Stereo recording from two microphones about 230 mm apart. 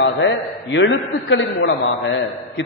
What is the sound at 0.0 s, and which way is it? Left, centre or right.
A man's voice, left.